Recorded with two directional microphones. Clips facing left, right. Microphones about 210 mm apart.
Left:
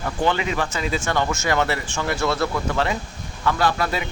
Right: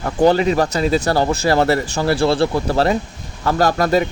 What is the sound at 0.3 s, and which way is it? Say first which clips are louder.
Speech: right 9 dB; 40° right (ahead or behind).